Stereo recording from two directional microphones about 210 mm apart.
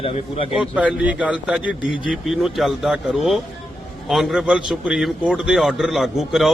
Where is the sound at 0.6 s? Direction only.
5° right (ahead or behind).